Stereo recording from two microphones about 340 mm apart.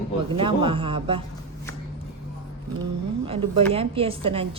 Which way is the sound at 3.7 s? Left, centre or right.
Centre.